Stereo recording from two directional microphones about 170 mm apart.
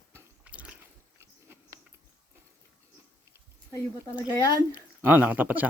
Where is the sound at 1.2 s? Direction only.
15° right (ahead or behind).